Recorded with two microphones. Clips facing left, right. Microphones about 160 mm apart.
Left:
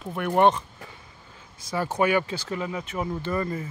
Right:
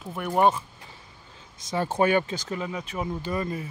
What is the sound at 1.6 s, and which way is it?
Speech, 25° right (ahead or behind).